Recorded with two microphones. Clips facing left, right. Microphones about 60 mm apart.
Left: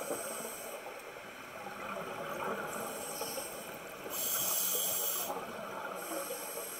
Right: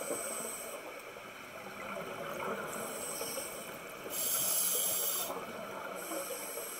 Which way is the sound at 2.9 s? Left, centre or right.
Left.